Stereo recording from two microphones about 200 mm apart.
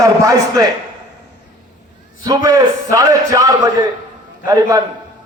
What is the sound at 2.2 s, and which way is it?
A man's voice, 15° right (ahead or behind).